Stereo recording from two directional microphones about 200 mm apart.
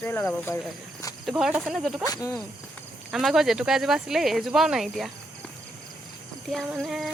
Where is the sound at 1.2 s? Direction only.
Centre (ahead or behind).